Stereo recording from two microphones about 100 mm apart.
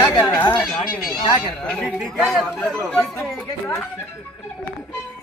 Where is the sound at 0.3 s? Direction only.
20° left (ahead or behind).